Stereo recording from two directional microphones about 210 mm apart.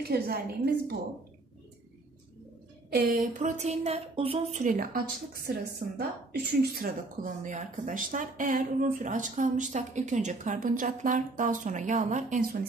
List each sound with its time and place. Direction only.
0.0 s a woman's voice: 50° right (ahead or behind)
2.9 s a woman's voice: 45° right (ahead or behind)